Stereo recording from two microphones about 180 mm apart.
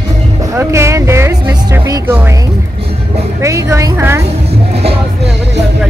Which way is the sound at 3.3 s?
15° right (ahead or behind).